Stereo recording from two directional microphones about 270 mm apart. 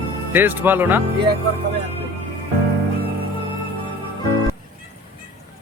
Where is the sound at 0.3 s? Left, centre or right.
Centre.